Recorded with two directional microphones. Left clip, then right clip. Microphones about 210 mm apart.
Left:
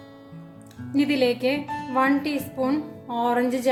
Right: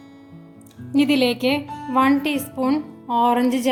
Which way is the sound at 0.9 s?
30° right (ahead or behind).